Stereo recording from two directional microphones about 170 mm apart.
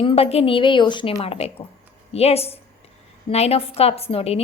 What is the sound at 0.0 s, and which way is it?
A woman's voice, 35° left (ahead or behind).